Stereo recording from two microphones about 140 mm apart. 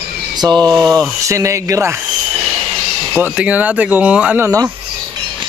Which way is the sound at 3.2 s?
10° right (ahead or behind).